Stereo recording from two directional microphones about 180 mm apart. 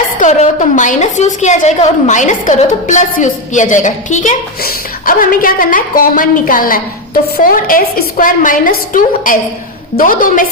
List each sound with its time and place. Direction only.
0.2 s a woman's voice: 45° left (ahead or behind)